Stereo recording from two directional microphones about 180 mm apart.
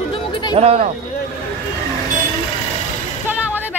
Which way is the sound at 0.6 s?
35° right (ahead or behind).